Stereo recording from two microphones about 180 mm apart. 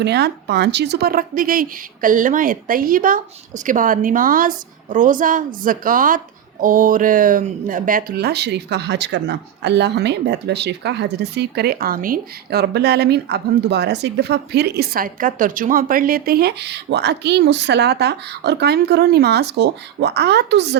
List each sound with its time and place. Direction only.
0.0 s speech: 70° right (ahead or behind)